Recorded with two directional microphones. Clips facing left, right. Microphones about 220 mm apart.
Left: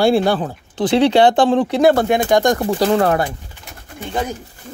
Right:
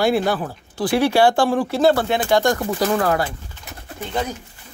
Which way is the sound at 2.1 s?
15° left (ahead or behind).